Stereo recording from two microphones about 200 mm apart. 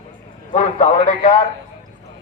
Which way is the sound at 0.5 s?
40° left (ahead or behind).